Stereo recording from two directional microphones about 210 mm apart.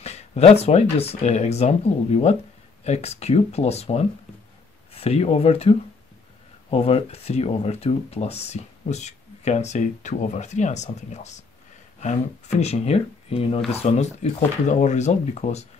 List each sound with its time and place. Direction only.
0.0 s speech: 30° left (ahead or behind)